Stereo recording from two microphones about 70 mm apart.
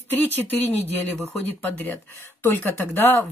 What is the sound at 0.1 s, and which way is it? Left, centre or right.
Speech, left.